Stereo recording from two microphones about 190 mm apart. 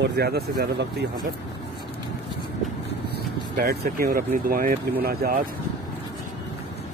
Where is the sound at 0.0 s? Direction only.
60° right (ahead or behind).